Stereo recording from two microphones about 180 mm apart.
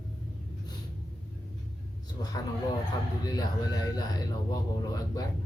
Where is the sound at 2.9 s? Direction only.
25° left (ahead or behind).